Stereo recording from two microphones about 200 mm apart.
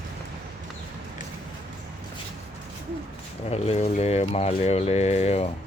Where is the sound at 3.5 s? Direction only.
30° left (ahead or behind).